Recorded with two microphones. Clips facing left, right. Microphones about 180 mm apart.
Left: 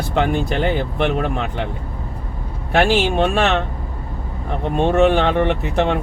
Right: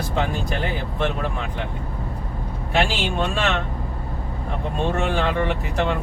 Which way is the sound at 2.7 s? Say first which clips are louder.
Left 7 dB; 65° left (ahead or behind).